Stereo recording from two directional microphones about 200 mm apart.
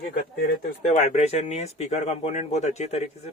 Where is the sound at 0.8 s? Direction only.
35° left (ahead or behind).